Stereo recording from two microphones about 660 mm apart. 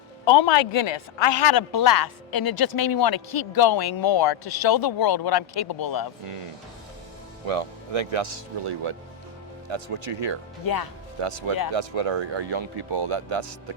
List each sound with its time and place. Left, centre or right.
0.3 s speech: left
7.4 s speech: right
11.2 s speech: right